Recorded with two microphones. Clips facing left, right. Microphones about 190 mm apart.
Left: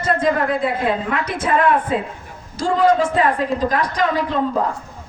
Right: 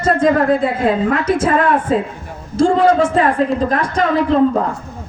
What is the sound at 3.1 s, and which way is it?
Speech, 45° right (ahead or behind).